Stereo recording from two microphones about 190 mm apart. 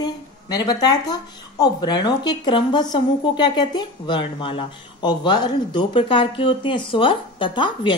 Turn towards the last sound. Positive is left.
turn(degrees=25)  # may be behind; listen again after turning